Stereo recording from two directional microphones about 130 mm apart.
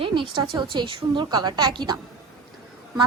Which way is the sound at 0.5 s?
35° right (ahead or behind).